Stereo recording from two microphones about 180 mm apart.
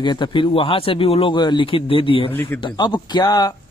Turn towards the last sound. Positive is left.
turn(degrees=20)  # may be behind; listen again after turning